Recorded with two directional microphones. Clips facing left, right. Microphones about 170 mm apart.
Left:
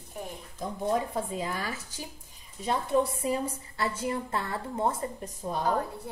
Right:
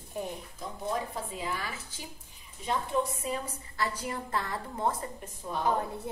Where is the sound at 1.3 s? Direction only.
40° left (ahead or behind).